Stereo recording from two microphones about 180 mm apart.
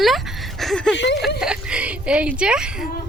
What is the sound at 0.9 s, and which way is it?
Speech, 75° left (ahead or behind).